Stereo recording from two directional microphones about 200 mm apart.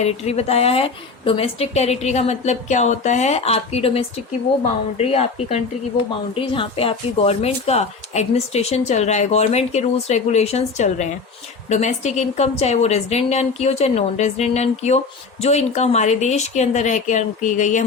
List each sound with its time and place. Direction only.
0.0 s a woman's voice: 30° left (ahead or behind)